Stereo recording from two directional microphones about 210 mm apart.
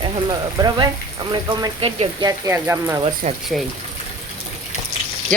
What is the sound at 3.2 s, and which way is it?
Speech, 35° right (ahead or behind).